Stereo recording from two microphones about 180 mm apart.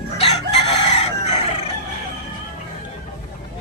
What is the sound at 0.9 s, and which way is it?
Chicken, 35° left (ahead or behind).